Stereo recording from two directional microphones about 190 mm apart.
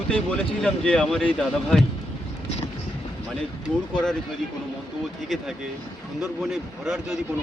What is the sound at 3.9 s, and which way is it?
Speech, 5° left (ahead or behind).